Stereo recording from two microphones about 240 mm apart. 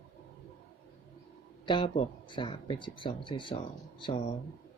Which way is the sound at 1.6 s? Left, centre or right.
Left.